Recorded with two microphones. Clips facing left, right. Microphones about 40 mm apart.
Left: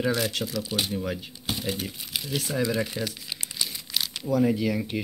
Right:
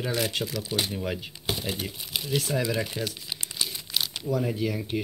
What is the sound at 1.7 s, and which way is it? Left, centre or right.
Speech, right.